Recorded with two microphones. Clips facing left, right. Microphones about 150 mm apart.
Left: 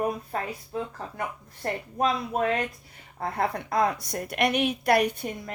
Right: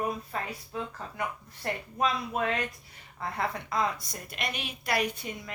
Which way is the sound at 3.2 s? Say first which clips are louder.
Left 5 dB; 55° left (ahead or behind).